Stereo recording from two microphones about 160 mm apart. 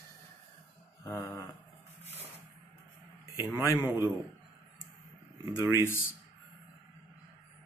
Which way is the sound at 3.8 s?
15° right (ahead or behind).